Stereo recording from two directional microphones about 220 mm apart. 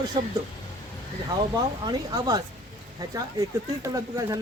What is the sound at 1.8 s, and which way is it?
Speech, 20° right (ahead or behind).